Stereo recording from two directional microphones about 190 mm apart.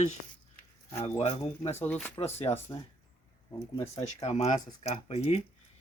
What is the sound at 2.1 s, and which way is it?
Speech, 30° left (ahead or behind).